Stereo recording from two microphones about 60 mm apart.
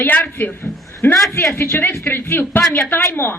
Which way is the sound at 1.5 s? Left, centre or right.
Left.